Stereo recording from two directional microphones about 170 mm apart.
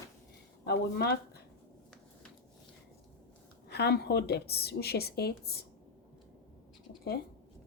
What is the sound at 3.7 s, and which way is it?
A woman's voice, 75° left (ahead or behind).